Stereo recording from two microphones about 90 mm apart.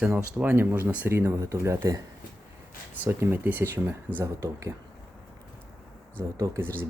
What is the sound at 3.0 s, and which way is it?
Speech, 30° right (ahead or behind).